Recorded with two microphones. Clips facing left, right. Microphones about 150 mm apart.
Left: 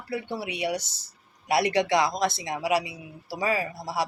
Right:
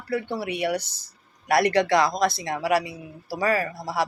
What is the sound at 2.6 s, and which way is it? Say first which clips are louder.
Speech: right 2 dB; 50° right (ahead or behind).